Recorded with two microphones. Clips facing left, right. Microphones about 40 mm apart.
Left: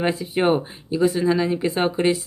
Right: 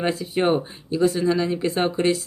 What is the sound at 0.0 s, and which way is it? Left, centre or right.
Speech, centre.